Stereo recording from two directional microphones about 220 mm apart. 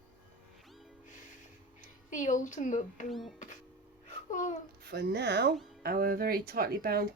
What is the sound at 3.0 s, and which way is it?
Speech, centre (ahead or behind).